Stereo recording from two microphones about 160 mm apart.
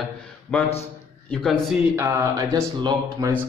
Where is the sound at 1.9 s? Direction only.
20° right (ahead or behind).